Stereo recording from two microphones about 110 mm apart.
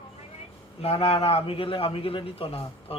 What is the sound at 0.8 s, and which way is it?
A man's voice, 65° left (ahead or behind).